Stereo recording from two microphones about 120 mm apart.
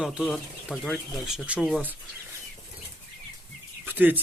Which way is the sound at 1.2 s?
10° right (ahead or behind).